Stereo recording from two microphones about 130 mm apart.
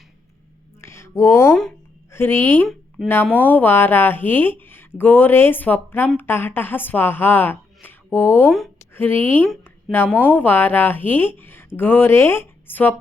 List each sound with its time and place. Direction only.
0.8 s a sound: 20° left (ahead or behind)
2.1 s speech: 15° left (ahead or behind)
3.0 s speech: centre (ahead or behind)
3.3 s speech: 15° left (ahead or behind)